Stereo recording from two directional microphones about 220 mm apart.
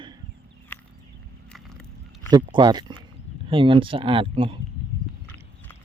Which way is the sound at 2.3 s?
20° right (ahead or behind).